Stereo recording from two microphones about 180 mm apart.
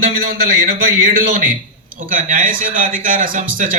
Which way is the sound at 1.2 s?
45° right (ahead or behind).